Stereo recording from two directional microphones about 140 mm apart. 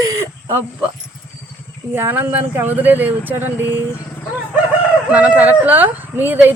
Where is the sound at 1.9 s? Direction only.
15° right (ahead or behind).